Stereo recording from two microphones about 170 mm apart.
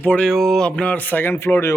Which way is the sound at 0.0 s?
5° left (ahead or behind).